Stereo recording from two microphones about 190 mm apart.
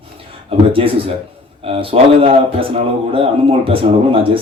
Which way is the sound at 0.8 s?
30° right (ahead or behind).